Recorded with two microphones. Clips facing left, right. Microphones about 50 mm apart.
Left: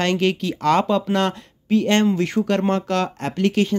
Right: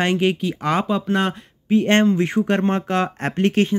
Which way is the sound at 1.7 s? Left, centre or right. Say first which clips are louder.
Right 1 dB; right.